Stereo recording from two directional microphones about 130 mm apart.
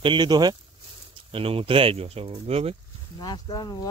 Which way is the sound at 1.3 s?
45° right (ahead or behind).